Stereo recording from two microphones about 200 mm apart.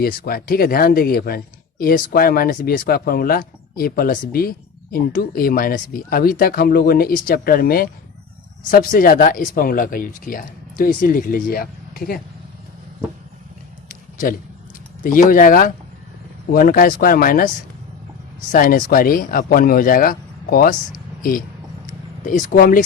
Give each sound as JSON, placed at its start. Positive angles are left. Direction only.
{"t": 0.0, "sound": "speech", "side_deg": 50}
{"t": 15.0, "sound": "speech", "side_deg": 45}
{"t": 18.5, "sound": "speech", "side_deg": 45}
{"t": 22.2, "sound": "speech", "side_deg": 40}